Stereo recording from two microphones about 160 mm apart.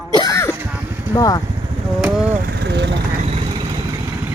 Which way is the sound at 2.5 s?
90° right.